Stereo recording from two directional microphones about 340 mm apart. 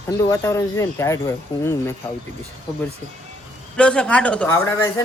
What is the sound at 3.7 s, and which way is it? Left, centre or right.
Speech, centre.